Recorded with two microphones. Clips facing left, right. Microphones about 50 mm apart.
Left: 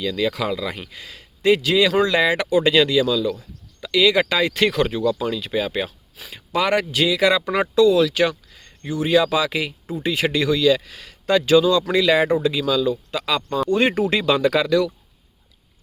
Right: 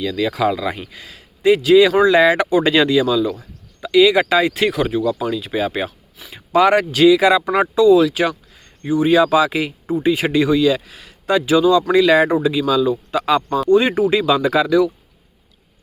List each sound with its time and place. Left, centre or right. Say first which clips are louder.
0.3 s speech: right 5 dB; right
4.7 s speech: right 2 dB; centre
5.5 s speech: right 2 dB; right
7.2 s speech: right 4 dB; centre
13.7 s speech: right 5 dB; centre